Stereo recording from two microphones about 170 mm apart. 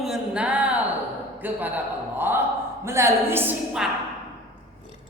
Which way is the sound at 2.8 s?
15° right (ahead or behind).